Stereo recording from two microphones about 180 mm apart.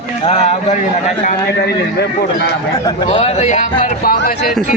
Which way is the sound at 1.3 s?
60° left (ahead or behind).